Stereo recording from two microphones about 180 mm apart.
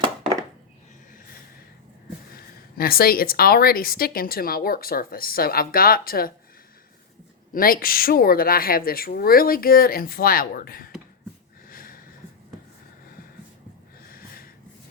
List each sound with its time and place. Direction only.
2.3 s a woman's voice: 55° left (ahead or behind)
7.5 s a woman's voice: 55° left (ahead or behind)
11.7 s a sound: 55° left (ahead or behind)
14.1 s snort: 55° left (ahead or behind)